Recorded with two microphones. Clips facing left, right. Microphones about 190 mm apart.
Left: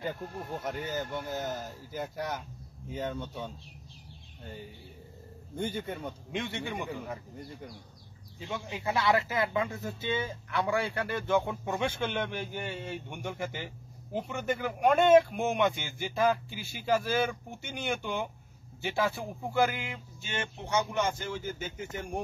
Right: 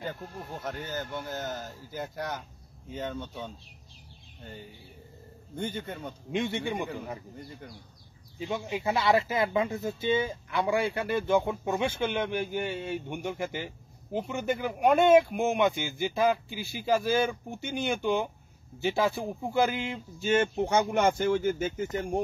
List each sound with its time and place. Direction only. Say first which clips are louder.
0.7 s speech: even; 10° left (ahead or behind)
5.6 s speech: left 1 dB; 5° left (ahead or behind)
6.3 s speech: right 6 dB; 15° right (ahead or behind)
8.5 s a man's voice: right 4 dB; 15° right (ahead or behind)
20.2 s speech: right 14 dB; 45° right (ahead or behind)
21.9 s speech: right 4 dB; 30° right (ahead or behind)